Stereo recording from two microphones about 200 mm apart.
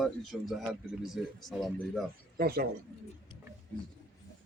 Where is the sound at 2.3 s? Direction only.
50° right (ahead or behind).